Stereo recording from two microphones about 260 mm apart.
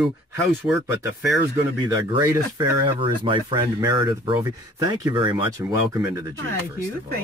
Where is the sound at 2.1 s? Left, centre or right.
Centre.